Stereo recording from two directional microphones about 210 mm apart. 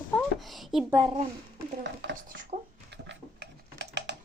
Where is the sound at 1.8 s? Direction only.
55° right (ahead or behind).